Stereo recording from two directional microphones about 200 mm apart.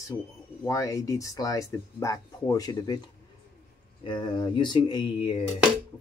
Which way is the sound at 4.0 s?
25° left (ahead or behind).